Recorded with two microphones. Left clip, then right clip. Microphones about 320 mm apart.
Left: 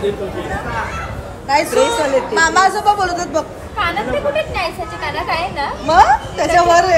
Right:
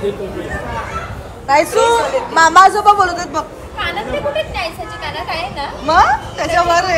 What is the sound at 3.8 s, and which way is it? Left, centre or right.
Speech, left.